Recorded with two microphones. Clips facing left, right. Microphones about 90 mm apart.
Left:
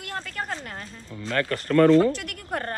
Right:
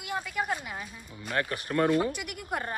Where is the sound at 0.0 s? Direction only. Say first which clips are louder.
Right 1 dB; 10° right (ahead or behind).